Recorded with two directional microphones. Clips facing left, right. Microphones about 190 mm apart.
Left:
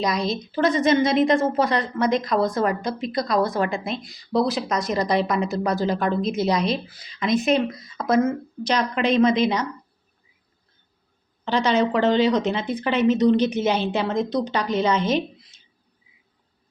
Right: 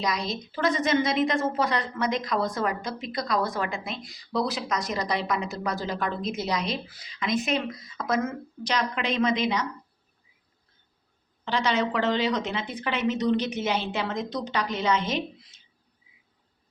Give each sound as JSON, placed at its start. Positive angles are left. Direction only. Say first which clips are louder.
{"t": 0.0, "sound": "a woman's voice", "louder": "left 5 dB", "side_deg": 30}
{"t": 2.0, "sound": "a woman's voice", "louder": "left 7 dB", "side_deg": 45}
{"t": 11.4, "sound": "a woman's voice", "louder": "left 5 dB", "side_deg": 30}